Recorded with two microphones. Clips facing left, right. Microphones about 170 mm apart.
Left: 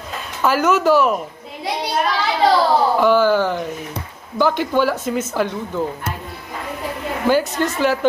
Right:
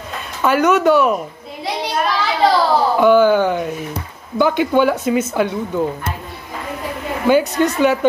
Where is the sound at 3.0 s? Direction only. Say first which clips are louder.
Right 6 dB; 15° right (ahead or behind).